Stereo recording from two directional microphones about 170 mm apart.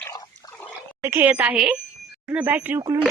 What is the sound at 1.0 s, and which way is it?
Speech, 10° right (ahead or behind).